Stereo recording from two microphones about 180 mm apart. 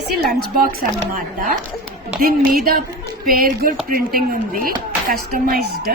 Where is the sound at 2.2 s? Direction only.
55° right (ahead or behind).